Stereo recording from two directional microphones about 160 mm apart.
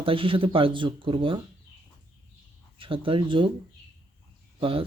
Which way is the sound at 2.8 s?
35° right (ahead or behind).